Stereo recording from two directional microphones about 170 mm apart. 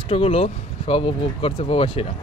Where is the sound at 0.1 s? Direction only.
35° left (ahead or behind).